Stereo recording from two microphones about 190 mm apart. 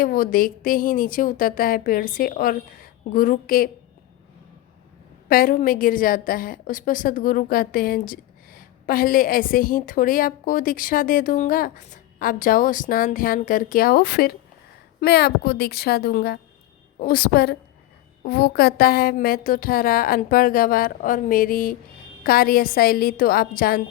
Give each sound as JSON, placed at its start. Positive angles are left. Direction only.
{"t": 0.0, "sound": "a woman's voice", "side_deg": 45}
{"t": 5.3, "sound": "a woman's voice", "side_deg": 50}